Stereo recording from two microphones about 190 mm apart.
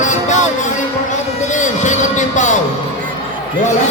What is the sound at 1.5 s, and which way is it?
A man's voice, 40° left (ahead or behind).